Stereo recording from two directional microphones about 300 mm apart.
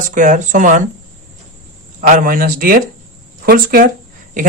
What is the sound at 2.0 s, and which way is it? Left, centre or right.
Speech, right.